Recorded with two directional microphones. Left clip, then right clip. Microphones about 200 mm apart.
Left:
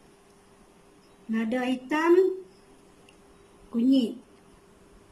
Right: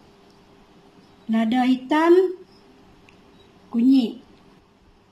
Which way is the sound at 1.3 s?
25° right (ahead or behind).